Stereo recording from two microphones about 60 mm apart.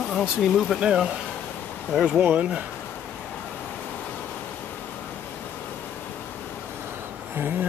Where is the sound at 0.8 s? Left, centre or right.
Centre.